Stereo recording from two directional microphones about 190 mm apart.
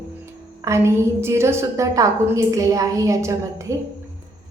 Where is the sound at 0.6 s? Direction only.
15° right (ahead or behind).